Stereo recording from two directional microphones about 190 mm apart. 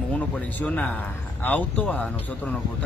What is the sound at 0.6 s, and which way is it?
Speech, 10° left (ahead or behind).